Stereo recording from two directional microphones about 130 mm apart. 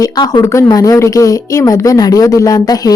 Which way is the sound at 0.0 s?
30° left (ahead or behind).